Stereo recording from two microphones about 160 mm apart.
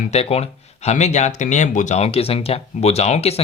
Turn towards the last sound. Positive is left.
turn(degrees=40)  # may be behind; listen again after turning